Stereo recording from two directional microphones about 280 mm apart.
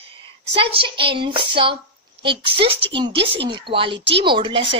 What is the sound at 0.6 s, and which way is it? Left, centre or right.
A woman's voice, centre.